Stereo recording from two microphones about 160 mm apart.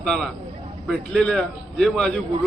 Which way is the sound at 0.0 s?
5° left (ahead or behind).